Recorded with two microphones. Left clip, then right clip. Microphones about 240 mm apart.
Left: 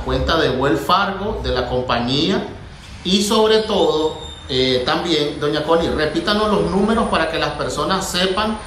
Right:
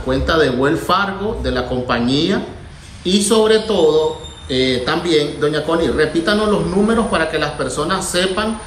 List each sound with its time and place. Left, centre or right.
0.1 s a man's voice: centre